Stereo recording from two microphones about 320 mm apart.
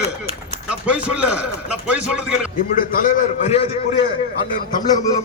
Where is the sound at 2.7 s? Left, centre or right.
Left.